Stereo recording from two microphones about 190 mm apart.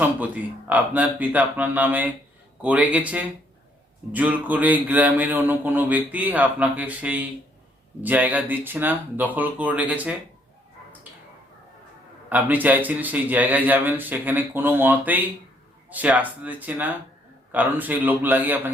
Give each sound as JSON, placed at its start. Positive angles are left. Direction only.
{"t": 0.0, "sound": "a man's voice", "side_deg": -10}
{"t": 12.3, "sound": "speech", "side_deg": -10}